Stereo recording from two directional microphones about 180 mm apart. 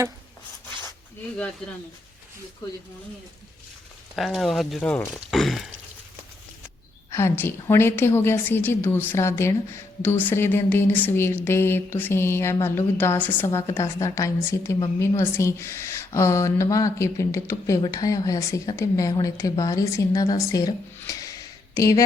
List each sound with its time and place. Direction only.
4.1 s speech: centre (ahead or behind)
7.1 s a woman's voice: 15° left (ahead or behind)